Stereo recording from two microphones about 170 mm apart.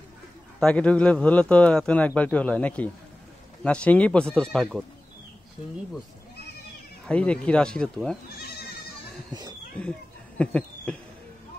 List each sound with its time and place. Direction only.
0.6 s speech: 5° left (ahead or behind)
7.1 s speech: 5° left (ahead or behind)
8.4 s goat: 70° left (ahead or behind)
9.8 s a sound: 5° left (ahead or behind)